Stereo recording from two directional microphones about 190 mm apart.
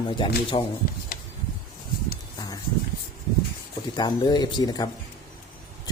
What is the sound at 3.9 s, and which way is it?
Speech, 20° left (ahead or behind).